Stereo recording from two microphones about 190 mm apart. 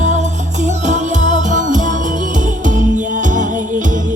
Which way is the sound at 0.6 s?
40° right (ahead or behind).